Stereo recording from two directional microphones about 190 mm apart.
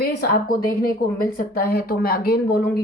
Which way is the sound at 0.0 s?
50° left (ahead or behind).